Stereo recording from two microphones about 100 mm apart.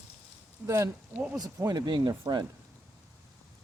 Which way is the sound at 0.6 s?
30° right (ahead or behind).